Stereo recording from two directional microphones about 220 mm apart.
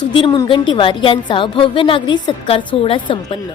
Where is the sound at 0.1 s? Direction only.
20° left (ahead or behind).